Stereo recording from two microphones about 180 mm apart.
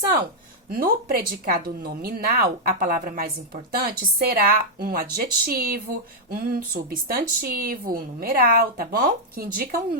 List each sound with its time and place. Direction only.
0.7 s a woman's voice: 55° right (ahead or behind)